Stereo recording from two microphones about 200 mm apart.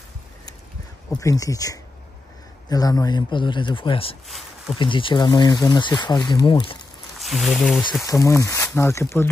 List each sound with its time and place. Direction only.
1.1 s speech: 15° left (ahead or behind)
4.3 s a sound: centre (ahead or behind)
4.7 s speech: 25° left (ahead or behind)
7.2 s speech: centre (ahead or behind)
8.0 s speech: 15° left (ahead or behind)